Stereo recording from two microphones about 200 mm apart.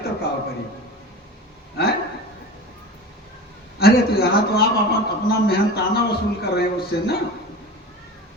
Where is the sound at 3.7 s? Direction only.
50° left (ahead or behind).